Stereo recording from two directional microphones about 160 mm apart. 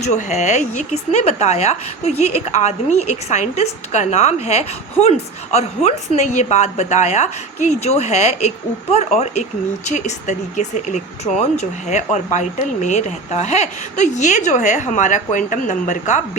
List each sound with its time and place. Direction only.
0.0 s a woman's voice: 45° left (ahead or behind)